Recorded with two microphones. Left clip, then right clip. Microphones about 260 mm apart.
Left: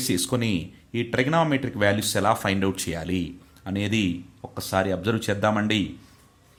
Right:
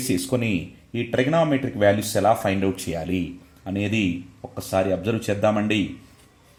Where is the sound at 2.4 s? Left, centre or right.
Left.